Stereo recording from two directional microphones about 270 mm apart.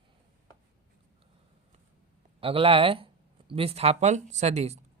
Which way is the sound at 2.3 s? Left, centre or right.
Right.